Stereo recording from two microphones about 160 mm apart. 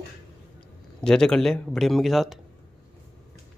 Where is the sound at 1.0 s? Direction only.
5° left (ahead or behind).